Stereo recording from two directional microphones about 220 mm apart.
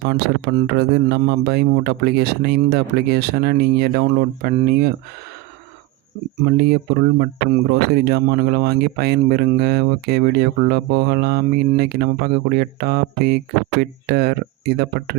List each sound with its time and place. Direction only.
0.0 s speech: 45° right (ahead or behind)
6.4 s speech: 45° right (ahead or behind)